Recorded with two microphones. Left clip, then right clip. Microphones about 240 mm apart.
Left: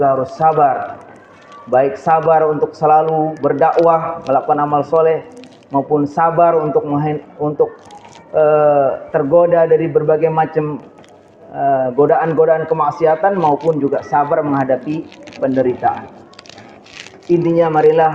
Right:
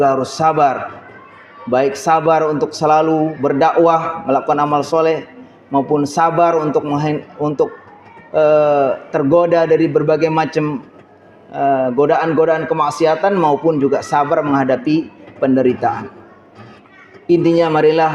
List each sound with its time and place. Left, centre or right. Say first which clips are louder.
0.0 s speech: left 1 dB; right
1.7 s speech: left 1 dB; right
17.5 s speech: left 3 dB; right